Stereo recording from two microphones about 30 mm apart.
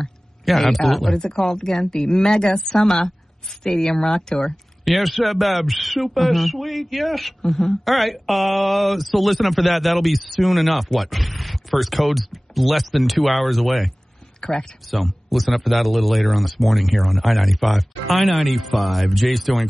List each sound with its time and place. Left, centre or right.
0.5 s speech: centre
1.1 s a woman's voice: centre
4.8 s speech: centre
14.4 s speech: left
14.9 s speech: centre